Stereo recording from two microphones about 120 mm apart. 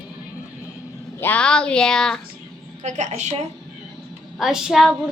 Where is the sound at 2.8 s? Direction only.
80° right.